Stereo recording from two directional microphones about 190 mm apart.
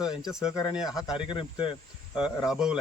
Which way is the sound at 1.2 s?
25° left (ahead or behind).